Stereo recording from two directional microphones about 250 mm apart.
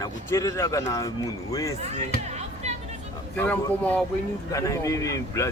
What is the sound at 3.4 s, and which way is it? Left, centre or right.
Speech, centre.